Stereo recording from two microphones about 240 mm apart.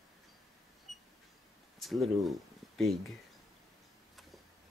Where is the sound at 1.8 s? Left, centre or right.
Centre.